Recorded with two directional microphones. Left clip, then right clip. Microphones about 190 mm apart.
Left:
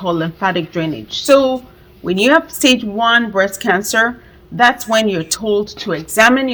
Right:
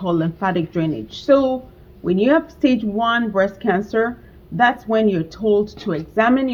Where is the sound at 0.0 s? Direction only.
20° left (ahead or behind).